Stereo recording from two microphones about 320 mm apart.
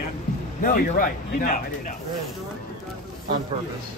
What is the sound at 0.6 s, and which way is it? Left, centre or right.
Speech, left.